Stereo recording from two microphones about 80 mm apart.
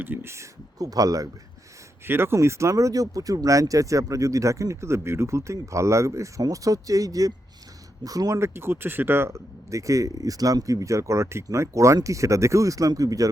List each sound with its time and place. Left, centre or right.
0.0 s speech: right
0.8 s speech: right
2.0 s speech: right
8.4 s speech: right